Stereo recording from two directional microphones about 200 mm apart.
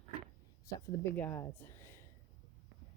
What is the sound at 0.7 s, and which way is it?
Speech, 10° left (ahead or behind).